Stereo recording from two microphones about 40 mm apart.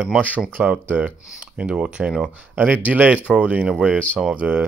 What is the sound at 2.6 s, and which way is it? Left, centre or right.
Speech, right.